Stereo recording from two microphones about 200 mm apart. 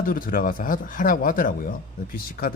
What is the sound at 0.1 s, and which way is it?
Speech, 45° left (ahead or behind).